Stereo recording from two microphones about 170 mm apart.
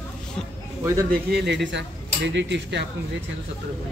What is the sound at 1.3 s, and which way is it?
Speech, 85° right.